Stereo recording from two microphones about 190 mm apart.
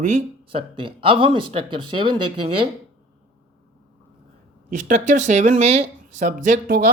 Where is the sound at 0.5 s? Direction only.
25° right (ahead or behind).